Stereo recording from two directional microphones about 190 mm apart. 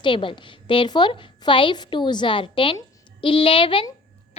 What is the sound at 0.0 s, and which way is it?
A woman's voice, 25° left (ahead or behind).